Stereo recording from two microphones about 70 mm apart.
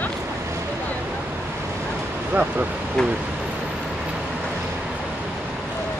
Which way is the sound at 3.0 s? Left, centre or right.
Centre.